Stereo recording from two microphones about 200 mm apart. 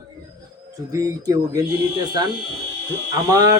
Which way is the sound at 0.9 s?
15° right (ahead or behind).